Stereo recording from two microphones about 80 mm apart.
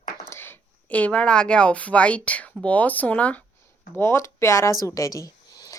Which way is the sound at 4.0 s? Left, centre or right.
Left.